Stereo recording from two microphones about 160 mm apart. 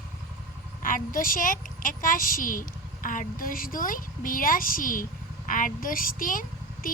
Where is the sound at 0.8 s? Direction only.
60° left (ahead or behind).